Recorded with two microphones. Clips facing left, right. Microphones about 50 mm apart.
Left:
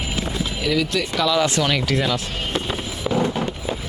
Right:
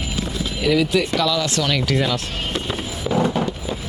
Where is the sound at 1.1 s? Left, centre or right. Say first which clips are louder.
Even; centre.